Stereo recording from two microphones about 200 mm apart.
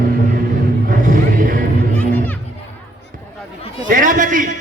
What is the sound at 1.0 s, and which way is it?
Music, 40° right (ahead or behind).